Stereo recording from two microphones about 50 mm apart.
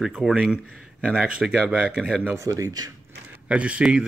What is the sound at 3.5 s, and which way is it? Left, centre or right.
Speech, right.